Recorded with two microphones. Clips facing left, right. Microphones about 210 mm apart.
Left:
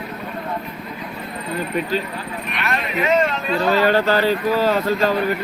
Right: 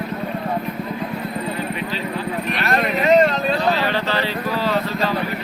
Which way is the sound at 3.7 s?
45° left (ahead or behind).